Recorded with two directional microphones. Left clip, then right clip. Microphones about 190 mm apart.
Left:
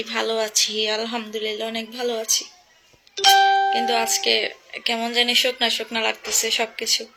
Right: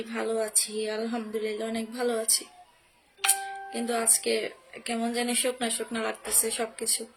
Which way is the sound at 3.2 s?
50° left (ahead or behind).